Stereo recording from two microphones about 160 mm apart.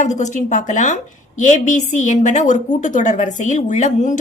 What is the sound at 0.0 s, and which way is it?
Speech, 45° left (ahead or behind).